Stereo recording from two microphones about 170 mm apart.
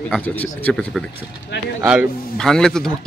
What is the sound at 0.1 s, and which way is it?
Speech, 10° left (ahead or behind).